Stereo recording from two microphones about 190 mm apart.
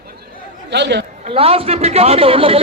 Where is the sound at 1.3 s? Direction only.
30° right (ahead or behind).